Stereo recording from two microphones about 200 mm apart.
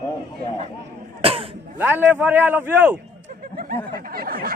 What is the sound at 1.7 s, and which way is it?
A man's voice, 10° right (ahead or behind).